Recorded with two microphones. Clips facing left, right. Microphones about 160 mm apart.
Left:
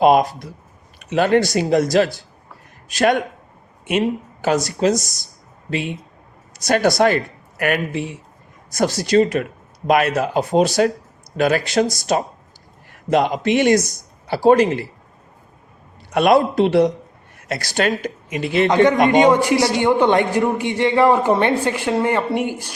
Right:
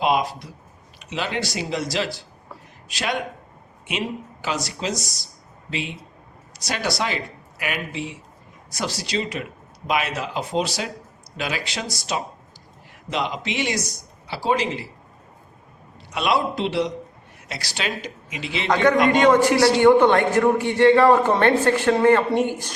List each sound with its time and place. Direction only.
0.0 s speech: 50° left (ahead or behind)
16.1 s speech: 50° left (ahead or behind)
19.1 s a man's voice: 15° left (ahead or behind)